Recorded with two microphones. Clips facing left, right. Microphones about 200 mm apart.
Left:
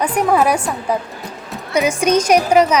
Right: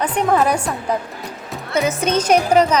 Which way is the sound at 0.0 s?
10° left (ahead or behind).